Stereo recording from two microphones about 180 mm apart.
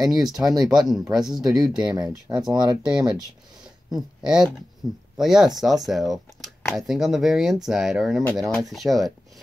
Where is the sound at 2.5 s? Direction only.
25° right (ahead or behind).